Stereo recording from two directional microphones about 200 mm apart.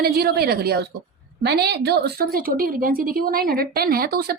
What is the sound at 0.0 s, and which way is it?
Speech, 50° right (ahead or behind).